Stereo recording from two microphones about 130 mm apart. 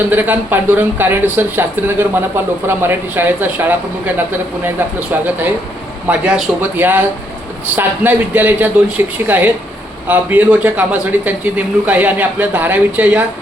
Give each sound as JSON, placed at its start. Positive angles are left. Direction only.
{"t": 0.1, "sound": "speech", "side_deg": -15}